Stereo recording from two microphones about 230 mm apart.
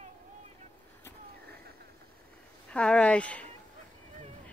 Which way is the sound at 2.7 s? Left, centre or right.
Centre.